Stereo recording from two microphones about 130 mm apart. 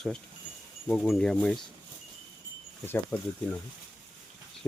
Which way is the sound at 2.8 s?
15° left (ahead or behind).